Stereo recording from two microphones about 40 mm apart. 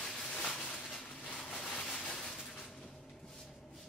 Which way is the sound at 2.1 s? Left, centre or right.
Centre.